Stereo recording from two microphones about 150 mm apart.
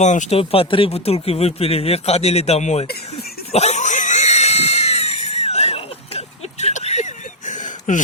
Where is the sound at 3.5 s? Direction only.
45° left (ahead or behind).